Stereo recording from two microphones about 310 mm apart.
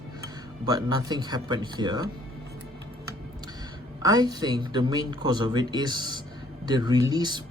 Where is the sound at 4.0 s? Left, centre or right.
Centre.